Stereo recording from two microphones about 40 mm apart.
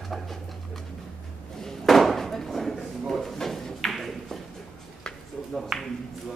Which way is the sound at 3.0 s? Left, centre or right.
Centre.